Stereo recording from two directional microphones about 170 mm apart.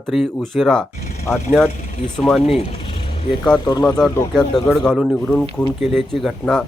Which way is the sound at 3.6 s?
25° left (ahead or behind).